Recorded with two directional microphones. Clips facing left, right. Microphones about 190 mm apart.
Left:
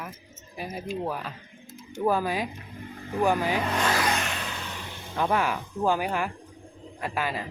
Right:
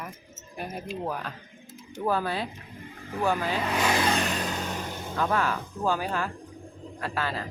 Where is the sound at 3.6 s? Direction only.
Centre (ahead or behind).